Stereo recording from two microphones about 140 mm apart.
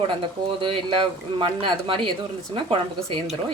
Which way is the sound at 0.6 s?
35° right (ahead or behind).